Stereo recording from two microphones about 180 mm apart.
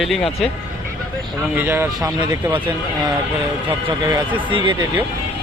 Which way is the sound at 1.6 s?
10° right (ahead or behind).